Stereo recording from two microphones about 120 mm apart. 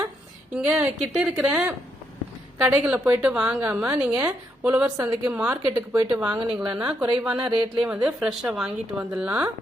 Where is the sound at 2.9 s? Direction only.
10° right (ahead or behind).